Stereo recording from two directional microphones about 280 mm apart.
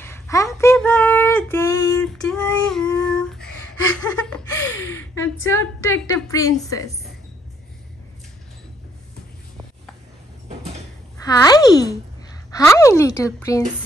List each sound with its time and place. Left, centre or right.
0.0 s child singing: centre
3.9 s a sound: centre
11.2 s speech: centre